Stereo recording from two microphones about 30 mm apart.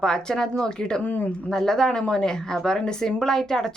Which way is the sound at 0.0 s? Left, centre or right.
Left.